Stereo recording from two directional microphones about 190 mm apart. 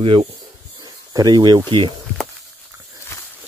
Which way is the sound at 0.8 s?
20° right (ahead or behind).